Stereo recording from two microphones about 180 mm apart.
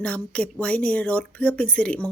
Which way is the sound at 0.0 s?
5° left (ahead or behind).